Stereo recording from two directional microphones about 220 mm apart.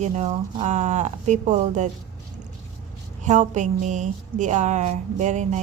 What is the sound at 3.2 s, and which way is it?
Speech, 35° right (ahead or behind).